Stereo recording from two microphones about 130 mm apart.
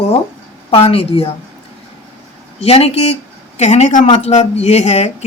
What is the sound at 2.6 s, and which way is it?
Speech, 50° left (ahead or behind).